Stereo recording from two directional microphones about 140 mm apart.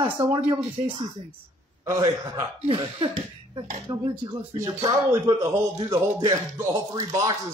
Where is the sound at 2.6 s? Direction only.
40° right (ahead or behind).